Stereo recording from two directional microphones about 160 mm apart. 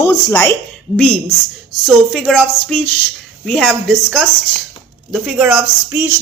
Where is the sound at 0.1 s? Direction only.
15° left (ahead or behind).